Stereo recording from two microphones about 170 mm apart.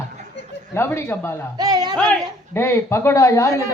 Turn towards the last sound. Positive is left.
turn(degrees=20)  # may be behind; listen again after turning